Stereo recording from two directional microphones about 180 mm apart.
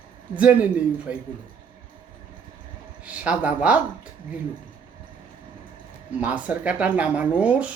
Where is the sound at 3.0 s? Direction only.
5° right (ahead or behind).